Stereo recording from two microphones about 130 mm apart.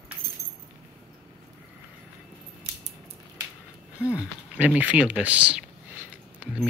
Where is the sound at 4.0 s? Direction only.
20° left (ahead or behind).